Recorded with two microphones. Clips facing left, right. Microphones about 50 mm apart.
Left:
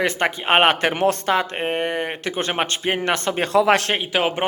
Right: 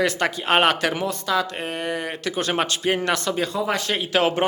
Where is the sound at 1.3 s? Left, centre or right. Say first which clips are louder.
Left 3 dB; left.